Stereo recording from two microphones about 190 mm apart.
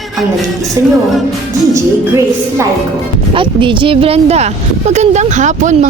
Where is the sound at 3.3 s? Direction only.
25° right (ahead or behind).